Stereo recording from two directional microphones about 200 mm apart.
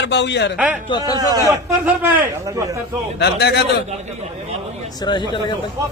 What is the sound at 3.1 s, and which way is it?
Speech, 55° left (ahead or behind).